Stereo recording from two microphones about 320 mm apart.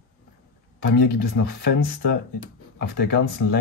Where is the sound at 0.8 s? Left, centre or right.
Left.